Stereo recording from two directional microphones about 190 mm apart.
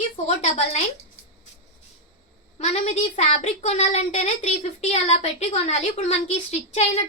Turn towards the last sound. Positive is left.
turn(degrees=35)  # may be behind; listen again after turning